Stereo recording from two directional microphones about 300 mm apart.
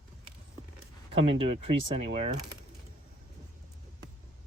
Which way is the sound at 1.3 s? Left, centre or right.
Centre.